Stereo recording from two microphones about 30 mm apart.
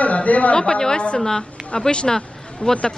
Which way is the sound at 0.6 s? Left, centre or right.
Left.